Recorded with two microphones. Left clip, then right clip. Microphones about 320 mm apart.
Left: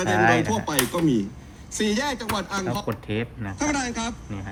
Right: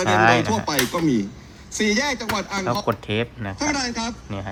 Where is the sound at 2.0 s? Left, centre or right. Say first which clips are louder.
Right 3 dB; centre.